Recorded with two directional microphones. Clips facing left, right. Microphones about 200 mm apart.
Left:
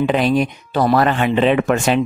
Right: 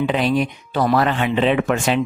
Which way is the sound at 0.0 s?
45° left (ahead or behind).